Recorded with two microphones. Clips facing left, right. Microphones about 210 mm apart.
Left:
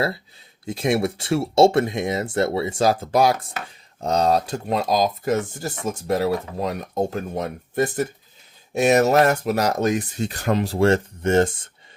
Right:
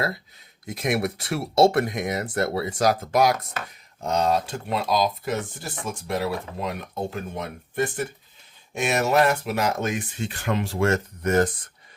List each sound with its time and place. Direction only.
0.6 s speech: 30° left (ahead or behind)